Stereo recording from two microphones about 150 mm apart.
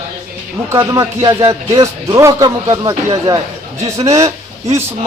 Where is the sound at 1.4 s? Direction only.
35° right (ahead or behind).